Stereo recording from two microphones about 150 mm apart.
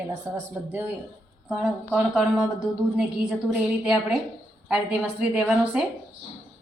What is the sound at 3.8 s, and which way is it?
A woman's voice, 5° right (ahead or behind).